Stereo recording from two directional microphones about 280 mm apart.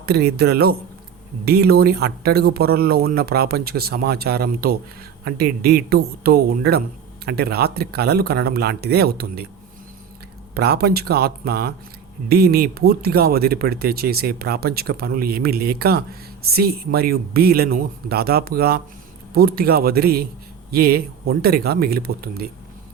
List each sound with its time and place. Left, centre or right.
0.0 s speech: right
10.5 s speech: right